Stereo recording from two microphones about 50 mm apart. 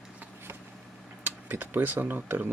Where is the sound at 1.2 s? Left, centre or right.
Right.